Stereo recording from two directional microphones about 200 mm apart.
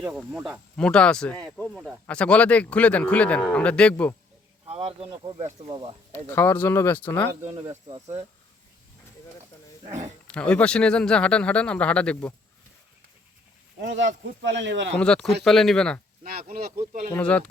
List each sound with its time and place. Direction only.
0.0 s speech: 5° right (ahead or behind)
0.8 s speech: 5° left (ahead or behind)
4.7 s speech: 30° right (ahead or behind)
6.2 s speech: 10° left (ahead or behind)
7.4 s speech: 20° right (ahead or behind)
10.2 s speech: 5° left (ahead or behind)
13.7 s speech: 60° right (ahead or behind)
14.9 s speech: 5° left (ahead or behind)
17.2 s speech: 5° left (ahead or behind)